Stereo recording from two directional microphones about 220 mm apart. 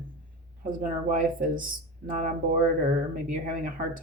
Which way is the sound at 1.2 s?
40° right (ahead or behind).